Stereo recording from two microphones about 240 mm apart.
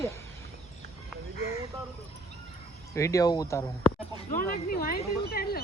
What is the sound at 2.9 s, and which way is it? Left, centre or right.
Speech, centre.